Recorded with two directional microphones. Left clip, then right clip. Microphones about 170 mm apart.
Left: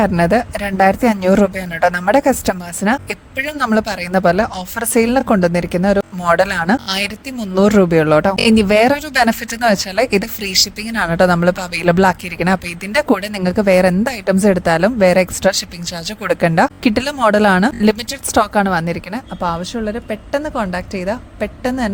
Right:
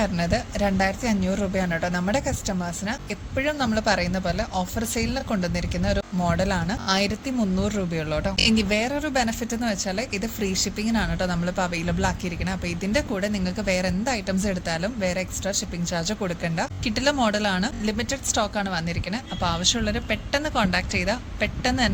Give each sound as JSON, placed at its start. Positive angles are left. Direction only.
{"t": 0.0, "sound": "speech", "side_deg": 65}
{"t": 7.5, "sound": "speech", "side_deg": 90}
{"t": 16.2, "sound": "a woman's voice", "side_deg": 70}